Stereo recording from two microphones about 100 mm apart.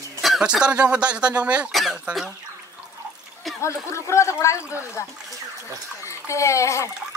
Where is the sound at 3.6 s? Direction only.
30° left (ahead or behind).